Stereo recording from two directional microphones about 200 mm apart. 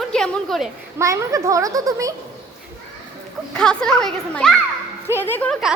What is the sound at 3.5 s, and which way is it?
A child's voice, 5° left (ahead or behind).